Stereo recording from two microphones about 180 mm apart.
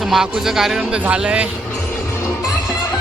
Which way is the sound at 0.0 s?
Centre (ahead or behind).